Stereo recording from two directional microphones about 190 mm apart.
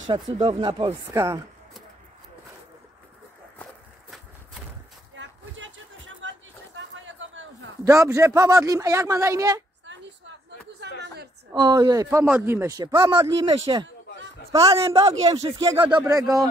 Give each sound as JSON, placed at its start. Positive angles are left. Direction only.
{"t": 0.1, "sound": "a man's voice", "side_deg": -25}
{"t": 0.8, "sound": "speech", "side_deg": -15}
{"t": 5.1, "sound": "a sound", "side_deg": -80}
{"t": 7.8, "sound": "speech", "side_deg": -15}
{"t": 11.5, "sound": "a man's voice", "side_deg": -20}